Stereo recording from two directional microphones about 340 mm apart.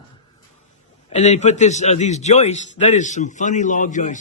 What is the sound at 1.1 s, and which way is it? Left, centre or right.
A man's voice, centre.